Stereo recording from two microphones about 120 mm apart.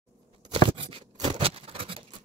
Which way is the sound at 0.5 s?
55° right (ahead or behind).